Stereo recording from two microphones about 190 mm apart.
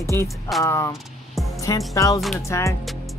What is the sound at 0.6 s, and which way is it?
Speech, 15° left (ahead or behind).